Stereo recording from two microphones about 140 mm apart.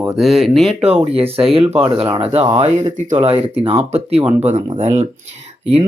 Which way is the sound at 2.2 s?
45° right (ahead or behind).